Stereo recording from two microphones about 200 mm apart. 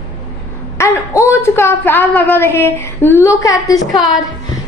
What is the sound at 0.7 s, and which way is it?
A woman's voice, 15° left (ahead or behind).